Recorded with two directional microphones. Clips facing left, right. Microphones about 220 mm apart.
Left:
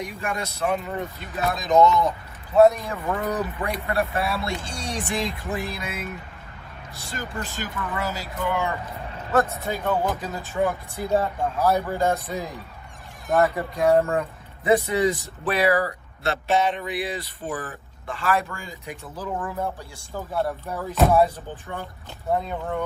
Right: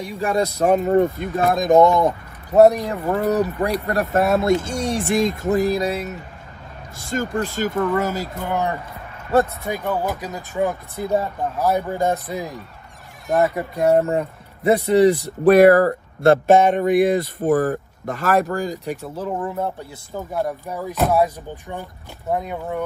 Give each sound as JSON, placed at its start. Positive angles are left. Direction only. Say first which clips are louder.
{"t": 0.0, "sound": "speech", "louder": "right 8 dB", "side_deg": -35}
{"t": 3.1, "sound": "speech", "louder": "right 6 dB", "side_deg": -30}
{"t": 3.3, "sound": "speech", "louder": "right 7 dB", "side_deg": -45}
{"t": 9.7, "sound": "speech", "louder": "right 1 dB", "side_deg": -15}
{"t": 15.4, "sound": "speech", "louder": "right 11 dB", "side_deg": -50}
{"t": 19.0, "sound": "speech", "louder": "right 2 dB", "side_deg": -25}